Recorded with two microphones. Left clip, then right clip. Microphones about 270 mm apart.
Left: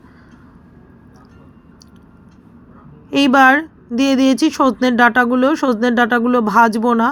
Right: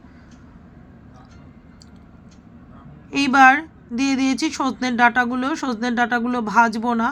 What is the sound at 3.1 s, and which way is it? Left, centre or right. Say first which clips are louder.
A woman's voice: left 3 dB; centre.